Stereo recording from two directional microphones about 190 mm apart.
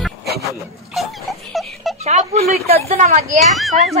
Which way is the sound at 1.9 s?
35° right (ahead or behind).